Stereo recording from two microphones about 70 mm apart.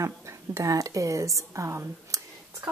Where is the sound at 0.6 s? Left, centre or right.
Right.